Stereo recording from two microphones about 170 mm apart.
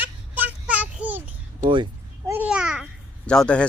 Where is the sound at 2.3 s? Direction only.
5° right (ahead or behind).